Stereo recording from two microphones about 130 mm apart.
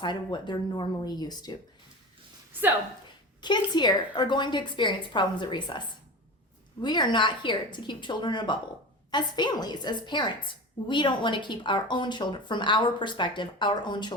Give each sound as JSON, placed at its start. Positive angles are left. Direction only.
{"t": 0.0, "sound": "a woman's voice", "side_deg": 35}
{"t": 2.5, "sound": "a woman's voice", "side_deg": -15}
{"t": 3.4, "sound": "a woman's voice", "side_deg": 35}
{"t": 6.8, "sound": "a woman's voice", "side_deg": 35}